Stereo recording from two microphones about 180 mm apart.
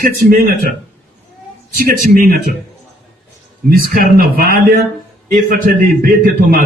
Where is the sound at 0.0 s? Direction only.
50° right (ahead or behind).